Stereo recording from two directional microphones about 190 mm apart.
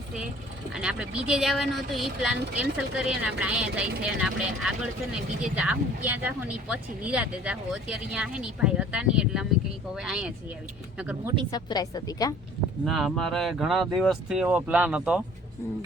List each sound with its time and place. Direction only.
0.7 s speech: 5° right (ahead or behind)
11.5 s a woman's voice: 20° left (ahead or behind)
12.8 s speech: centre (ahead or behind)